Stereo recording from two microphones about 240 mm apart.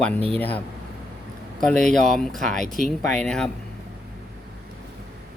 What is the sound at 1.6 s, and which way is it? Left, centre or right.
Mantra, centre.